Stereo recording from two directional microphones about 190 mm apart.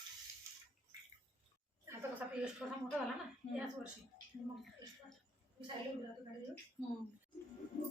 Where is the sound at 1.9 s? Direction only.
5° right (ahead or behind).